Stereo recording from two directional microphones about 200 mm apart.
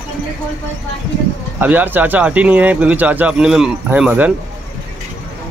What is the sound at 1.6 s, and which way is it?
Speech, 10° right (ahead or behind).